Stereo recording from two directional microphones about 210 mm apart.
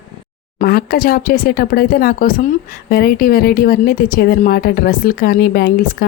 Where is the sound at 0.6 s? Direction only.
45° left (ahead or behind).